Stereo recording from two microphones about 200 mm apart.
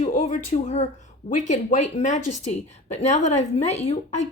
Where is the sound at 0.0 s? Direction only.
35° left (ahead or behind).